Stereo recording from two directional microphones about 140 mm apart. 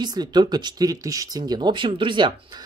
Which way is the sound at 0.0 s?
30° right (ahead or behind).